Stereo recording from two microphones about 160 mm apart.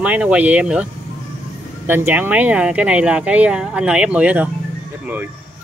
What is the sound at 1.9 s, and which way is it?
Speech, 15° right (ahead or behind).